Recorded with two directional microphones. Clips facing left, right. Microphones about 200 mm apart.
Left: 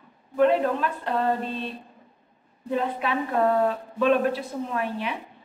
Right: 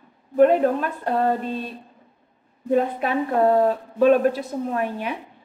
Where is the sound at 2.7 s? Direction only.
45° right (ahead or behind).